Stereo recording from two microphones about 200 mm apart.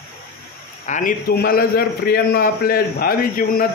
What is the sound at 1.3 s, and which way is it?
A man's voice, 50° left (ahead or behind).